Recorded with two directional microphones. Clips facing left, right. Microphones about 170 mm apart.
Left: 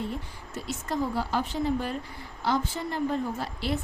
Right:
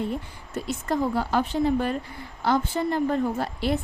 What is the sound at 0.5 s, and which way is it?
Speech, 55° right (ahead or behind).